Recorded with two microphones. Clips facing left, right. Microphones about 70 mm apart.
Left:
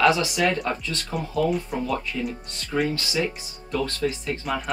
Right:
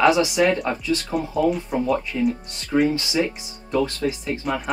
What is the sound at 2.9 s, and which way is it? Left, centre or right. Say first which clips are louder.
Speech: right 4 dB; centre.